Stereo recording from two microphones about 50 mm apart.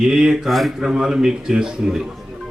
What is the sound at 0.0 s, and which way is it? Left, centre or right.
Speech, centre.